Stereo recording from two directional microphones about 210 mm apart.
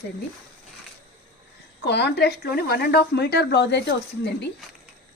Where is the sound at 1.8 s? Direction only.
55° left (ahead or behind).